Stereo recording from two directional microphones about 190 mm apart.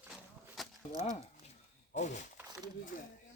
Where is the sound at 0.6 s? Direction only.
Centre (ahead or behind).